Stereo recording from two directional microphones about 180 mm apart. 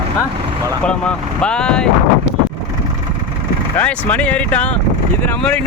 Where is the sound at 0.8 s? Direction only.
5° left (ahead or behind).